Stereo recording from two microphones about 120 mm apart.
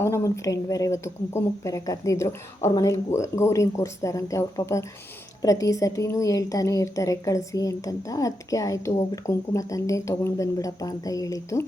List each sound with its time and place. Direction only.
0.0 s a woman's voice: 25° left (ahead or behind)